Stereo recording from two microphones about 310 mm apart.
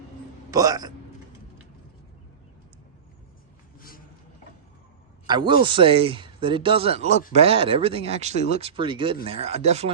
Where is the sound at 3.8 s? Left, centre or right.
Left.